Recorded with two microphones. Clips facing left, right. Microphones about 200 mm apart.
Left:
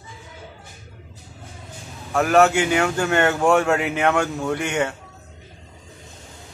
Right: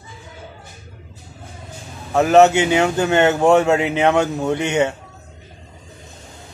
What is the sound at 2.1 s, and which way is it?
Speech, 20° right (ahead or behind).